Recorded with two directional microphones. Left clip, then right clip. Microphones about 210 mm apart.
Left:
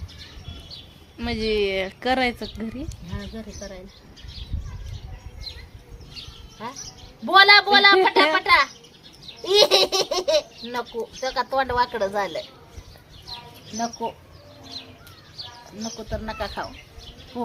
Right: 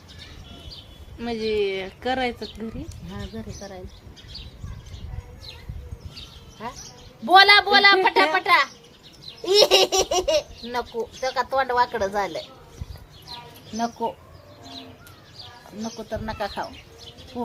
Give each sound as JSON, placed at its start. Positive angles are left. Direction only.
{"t": 1.2, "sound": "a woman's voice", "side_deg": 35}
{"t": 3.2, "sound": "speech", "side_deg": -15}
{"t": 6.6, "sound": "speech", "side_deg": -20}
{"t": 13.7, "sound": "speech", "side_deg": -30}
{"t": 15.8, "sound": "speech", "side_deg": -15}
{"t": 17.3, "sound": "speech", "side_deg": 5}